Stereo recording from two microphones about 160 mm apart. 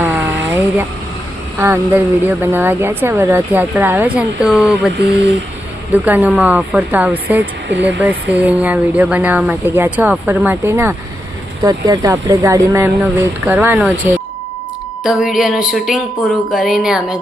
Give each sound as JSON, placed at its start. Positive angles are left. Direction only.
{"t": 0.0, "sound": "vehicle", "side_deg": -10}
{"t": 1.5, "sound": "speech", "side_deg": -15}
{"t": 5.9, "sound": "speech", "side_deg": -10}
{"t": 15.0, "sound": "a sound", "side_deg": -5}